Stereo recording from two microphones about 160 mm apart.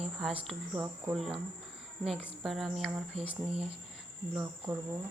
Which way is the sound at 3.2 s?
35° right (ahead or behind).